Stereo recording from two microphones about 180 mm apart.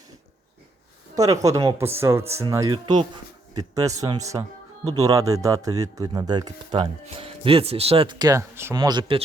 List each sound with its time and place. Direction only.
1.1 s speech: 20° right (ahead or behind)